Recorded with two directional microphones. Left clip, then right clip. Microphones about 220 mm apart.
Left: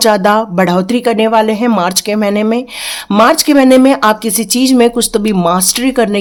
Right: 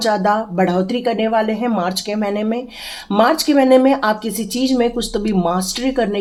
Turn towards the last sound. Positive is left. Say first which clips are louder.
# left 7 dB
turn(degrees=45)  # may be behind; listen again after turning